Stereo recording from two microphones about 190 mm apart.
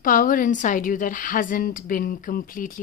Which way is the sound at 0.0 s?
45° left (ahead or behind).